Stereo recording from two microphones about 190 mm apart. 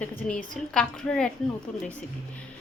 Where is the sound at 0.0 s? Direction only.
10° left (ahead or behind).